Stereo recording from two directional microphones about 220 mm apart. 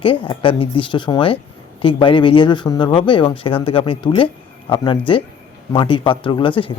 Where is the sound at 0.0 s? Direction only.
25° left (ahead or behind).